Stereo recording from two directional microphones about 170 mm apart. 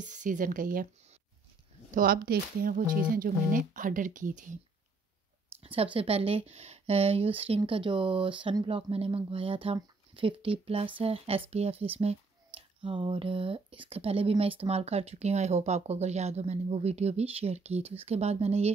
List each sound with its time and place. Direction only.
0.0 s speech: 45° right (ahead or behind)
1.9 s speech: 55° right (ahead or behind)
5.6 s a sound: 35° right (ahead or behind)
5.9 s speech: 35° right (ahead or behind)